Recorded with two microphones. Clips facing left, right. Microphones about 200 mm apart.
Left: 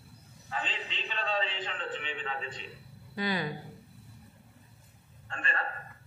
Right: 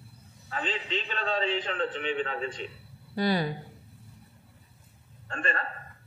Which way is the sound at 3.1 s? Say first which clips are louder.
Right 6 dB; 35° right (ahead or behind).